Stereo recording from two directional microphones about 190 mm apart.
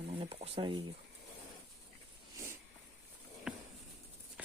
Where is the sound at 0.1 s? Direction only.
30° right (ahead or behind).